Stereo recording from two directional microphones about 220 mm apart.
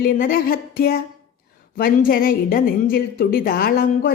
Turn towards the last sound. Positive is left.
turn(degrees=40)  # may be behind; listen again after turning